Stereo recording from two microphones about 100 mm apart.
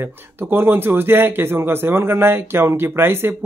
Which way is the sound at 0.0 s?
20° right (ahead or behind).